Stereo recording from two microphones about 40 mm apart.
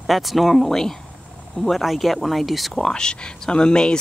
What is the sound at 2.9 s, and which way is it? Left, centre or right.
Speech, left.